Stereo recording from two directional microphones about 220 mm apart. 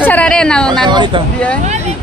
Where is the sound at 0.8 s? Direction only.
20° right (ahead or behind).